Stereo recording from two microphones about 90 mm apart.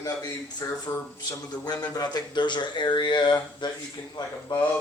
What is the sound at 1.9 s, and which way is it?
Speech, 50° left (ahead or behind).